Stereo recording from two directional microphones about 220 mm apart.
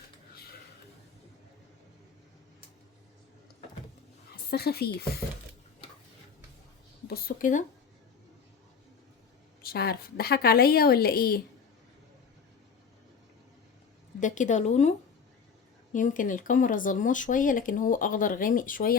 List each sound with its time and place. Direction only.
4.5 s a woman's voice: 45° left (ahead or behind)
7.1 s speech: 40° left (ahead or behind)
9.6 s a woman's voice: 45° left (ahead or behind)
14.2 s speech: 35° left (ahead or behind)